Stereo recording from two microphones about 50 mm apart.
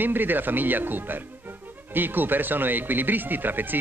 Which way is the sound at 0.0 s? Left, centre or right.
Right.